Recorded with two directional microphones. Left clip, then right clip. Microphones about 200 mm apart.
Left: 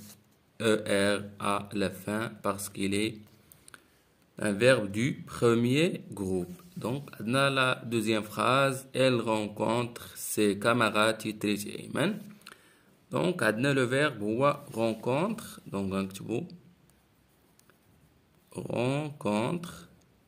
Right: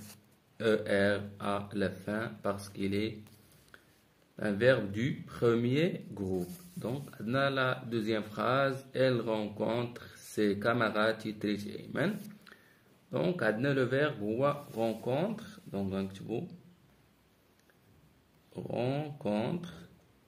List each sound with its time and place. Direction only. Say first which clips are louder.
0.6 s speech: left 2 dB; 40° left (ahead or behind)
4.4 s speech: left 3 dB; 40° left (ahead or behind)
18.5 s speech: left 3 dB; 50° left (ahead or behind)